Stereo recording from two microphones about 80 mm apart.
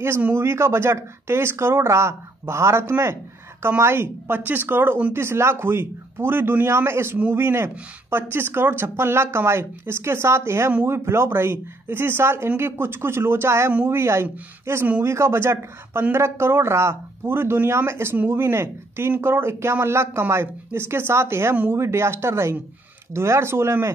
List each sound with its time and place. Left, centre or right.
0.3 s a man's voice: right